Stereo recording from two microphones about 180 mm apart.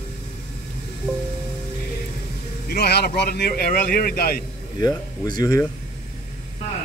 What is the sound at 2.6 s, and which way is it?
Speech, 60° left (ahead or behind).